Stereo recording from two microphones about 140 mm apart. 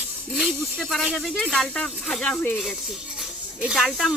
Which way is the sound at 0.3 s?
Centre (ahead or behind).